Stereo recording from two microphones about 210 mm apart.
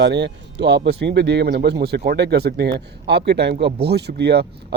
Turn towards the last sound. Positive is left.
turn(degrees=-50)  # may be behind; listen again after turning